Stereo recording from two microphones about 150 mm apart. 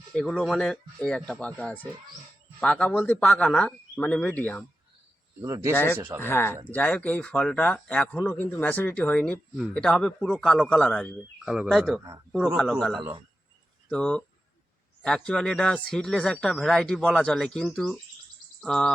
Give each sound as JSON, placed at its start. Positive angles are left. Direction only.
{"t": 0.1, "sound": "a man's voice", "side_deg": 5}
{"t": 5.4, "sound": "speech", "side_deg": -20}
{"t": 5.7, "sound": "a man's voice", "side_deg": 15}